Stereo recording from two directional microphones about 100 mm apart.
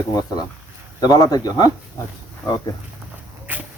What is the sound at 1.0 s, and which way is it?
Speech, 40° left (ahead or behind).